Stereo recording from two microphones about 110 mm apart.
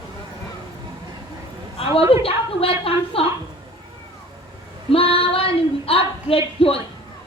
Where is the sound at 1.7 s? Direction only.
55° left (ahead or behind).